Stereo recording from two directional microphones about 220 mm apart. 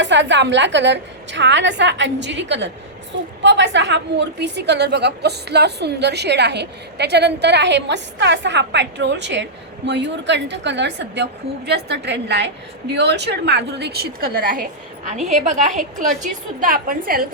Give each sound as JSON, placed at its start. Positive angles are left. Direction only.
{"t": 0.0, "sound": "a woman's voice", "side_deg": -55}